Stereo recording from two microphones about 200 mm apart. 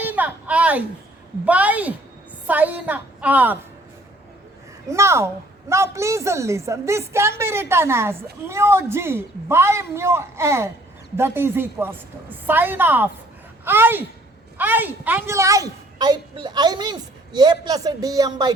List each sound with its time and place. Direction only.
0.0 s a sound: 10° right (ahead or behind)
1.5 s a woman's voice: 5° right (ahead or behind)
4.9 s a woman's voice: 15° right (ahead or behind)